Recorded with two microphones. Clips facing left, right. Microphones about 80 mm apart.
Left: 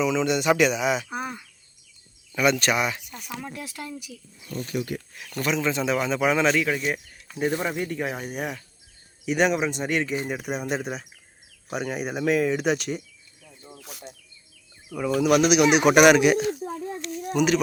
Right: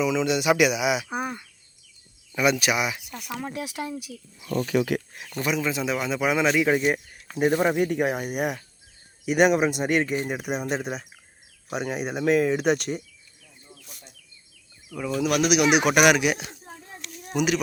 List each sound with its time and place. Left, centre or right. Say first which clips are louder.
0.0 s speech: even; centre
2.3 s speech: left 1 dB; centre
3.4 s speech: right 4 dB; centre
4.4 s speech: right 6 dB; right
5.2 s speech: even; centre
5.5 s speech: left 4 dB; centre
6.6 s speech: right 4 dB; right; by 13.0 s centre
14.9 s speech: left 4 dB; centre